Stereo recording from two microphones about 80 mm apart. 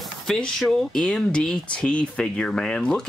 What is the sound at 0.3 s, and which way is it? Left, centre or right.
Speech, centre.